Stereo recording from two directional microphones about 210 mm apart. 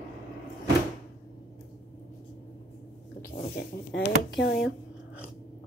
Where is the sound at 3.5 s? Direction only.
55° left (ahead or behind).